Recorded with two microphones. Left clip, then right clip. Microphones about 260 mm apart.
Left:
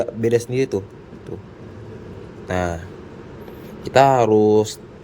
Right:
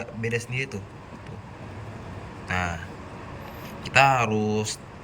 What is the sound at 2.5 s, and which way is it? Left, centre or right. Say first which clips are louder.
Speech: left 5 dB; centre.